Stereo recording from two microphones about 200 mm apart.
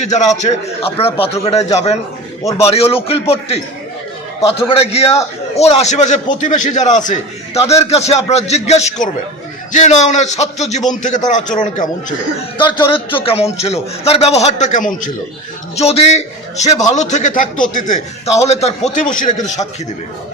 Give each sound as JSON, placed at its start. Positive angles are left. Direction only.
{"t": 0.0, "sound": "a man's voice", "side_deg": 35}
{"t": 2.4, "sound": "a man's voice", "side_deg": 15}
{"t": 2.6, "sound": "a man's voice", "side_deg": 30}
{"t": 12.5, "sound": "a man's voice", "side_deg": 20}
{"t": 15.7, "sound": "a man's voice", "side_deg": 30}